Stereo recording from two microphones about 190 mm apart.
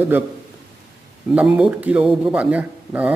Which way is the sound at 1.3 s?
5° right (ahead or behind).